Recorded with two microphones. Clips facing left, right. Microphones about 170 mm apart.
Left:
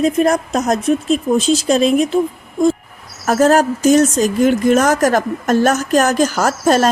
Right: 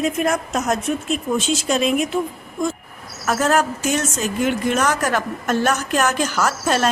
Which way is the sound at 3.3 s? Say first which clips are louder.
Left 6 dB; 40° left (ahead or behind).